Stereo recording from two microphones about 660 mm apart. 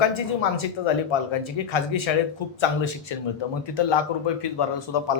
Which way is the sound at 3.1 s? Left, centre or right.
Left.